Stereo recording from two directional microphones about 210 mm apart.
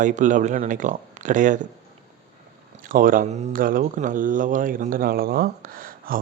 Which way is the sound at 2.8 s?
40° right (ahead or behind).